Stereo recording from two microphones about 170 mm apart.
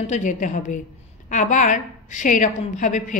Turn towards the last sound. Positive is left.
turn(degrees=45)  # may be behind; listen again after turning